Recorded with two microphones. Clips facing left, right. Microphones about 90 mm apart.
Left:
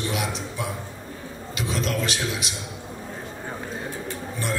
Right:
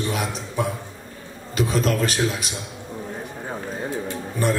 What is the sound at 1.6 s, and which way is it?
Speech, 45° right (ahead or behind).